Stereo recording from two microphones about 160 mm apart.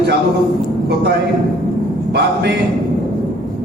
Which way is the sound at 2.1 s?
90° right.